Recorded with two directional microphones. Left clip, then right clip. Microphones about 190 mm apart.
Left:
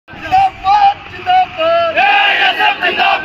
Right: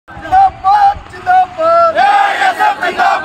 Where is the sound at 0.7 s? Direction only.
10° right (ahead or behind).